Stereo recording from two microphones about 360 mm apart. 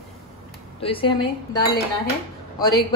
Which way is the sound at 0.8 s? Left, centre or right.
Centre.